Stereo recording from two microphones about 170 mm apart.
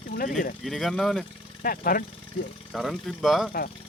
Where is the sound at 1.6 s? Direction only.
55° left (ahead or behind).